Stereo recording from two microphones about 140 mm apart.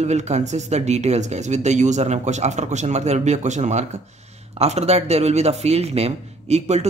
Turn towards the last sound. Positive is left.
turn(degrees=-50)  # may be behind; listen again after turning